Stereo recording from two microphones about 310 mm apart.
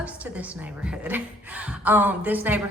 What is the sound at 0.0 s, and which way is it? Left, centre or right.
A woman's voice, centre.